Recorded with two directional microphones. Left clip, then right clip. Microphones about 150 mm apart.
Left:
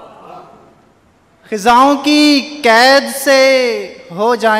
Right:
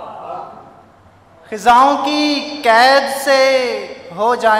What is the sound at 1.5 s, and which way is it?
Speech, 45° left (ahead or behind).